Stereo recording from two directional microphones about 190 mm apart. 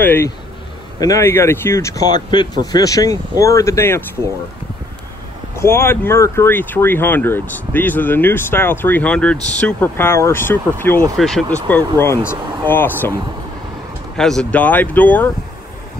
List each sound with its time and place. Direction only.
0.0 s speech: 10° left (ahead or behind)
5.6 s speech: 15° left (ahead or behind)
11.7 s speech: 15° left (ahead or behind)
14.1 s speech: 5° left (ahead or behind)